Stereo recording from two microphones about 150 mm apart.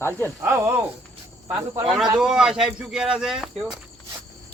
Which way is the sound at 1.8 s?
Centre (ahead or behind).